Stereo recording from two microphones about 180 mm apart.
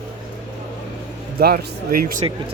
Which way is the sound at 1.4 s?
55° right (ahead or behind).